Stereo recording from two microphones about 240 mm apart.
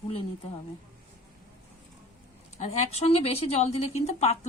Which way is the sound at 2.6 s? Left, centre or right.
Left.